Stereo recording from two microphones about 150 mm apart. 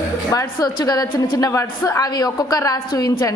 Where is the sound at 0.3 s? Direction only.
25° left (ahead or behind).